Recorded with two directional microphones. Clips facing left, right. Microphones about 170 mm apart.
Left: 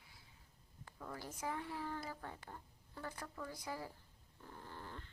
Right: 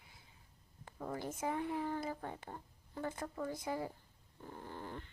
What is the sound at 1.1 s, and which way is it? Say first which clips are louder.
A woman's voice: right 5 dB; 25° right (ahead or behind).